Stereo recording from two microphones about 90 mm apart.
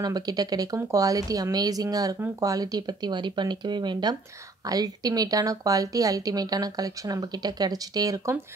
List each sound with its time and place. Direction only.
0.0 s a woman's voice: 50° right (ahead or behind)